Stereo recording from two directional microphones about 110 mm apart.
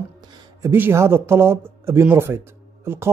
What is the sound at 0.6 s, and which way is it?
Speech, 20° right (ahead or behind).